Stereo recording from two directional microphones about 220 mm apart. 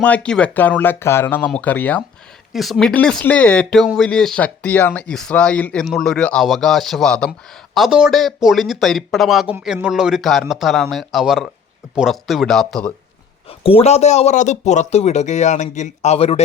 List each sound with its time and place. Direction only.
0.0 s speech: 5° left (ahead or behind)
13.7 s speech: 25° left (ahead or behind)